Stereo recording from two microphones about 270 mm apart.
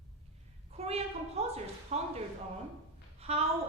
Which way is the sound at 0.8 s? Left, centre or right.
Right.